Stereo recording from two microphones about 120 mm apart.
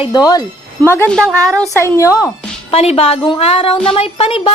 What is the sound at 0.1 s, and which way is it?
Speech, 35° left (ahead or behind).